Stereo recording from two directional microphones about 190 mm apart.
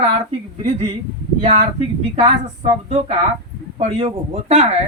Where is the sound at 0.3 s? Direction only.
30° right (ahead or behind).